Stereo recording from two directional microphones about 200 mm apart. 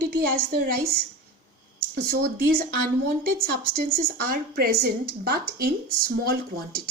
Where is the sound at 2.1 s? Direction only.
50° right (ahead or behind).